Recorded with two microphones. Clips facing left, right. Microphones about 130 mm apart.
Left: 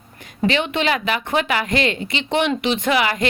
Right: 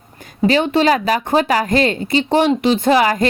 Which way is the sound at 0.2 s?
40° right (ahead or behind).